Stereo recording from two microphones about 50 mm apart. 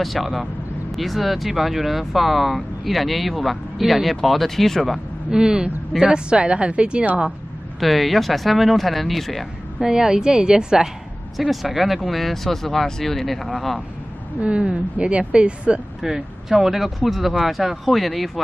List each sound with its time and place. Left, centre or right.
0.0 s speech: centre
5.3 s a woman's voice: centre
7.8 s speech: centre
9.8 s a woman's voice: centre
11.3 s speech: centre
14.4 s speech: right
16.0 s a woman's voice: centre